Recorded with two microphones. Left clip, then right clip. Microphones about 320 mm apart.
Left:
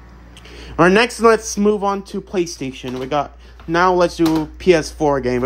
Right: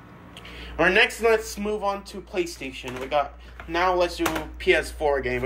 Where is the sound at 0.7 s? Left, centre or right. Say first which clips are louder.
Left 6 dB; left.